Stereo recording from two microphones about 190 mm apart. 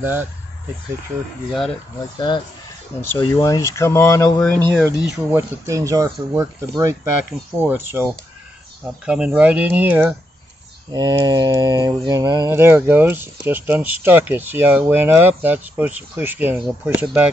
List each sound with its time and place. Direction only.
0.0 s mantra: 10° right (ahead or behind)
1.5 s speech: centre (ahead or behind)
2.1 s speech: 25° left (ahead or behind)
4.4 s speech: 5° left (ahead or behind)
5.7 s mantra: 15° right (ahead or behind)
7.5 s mantra: 10° right (ahead or behind)
9.0 s mantra: 5° right (ahead or behind)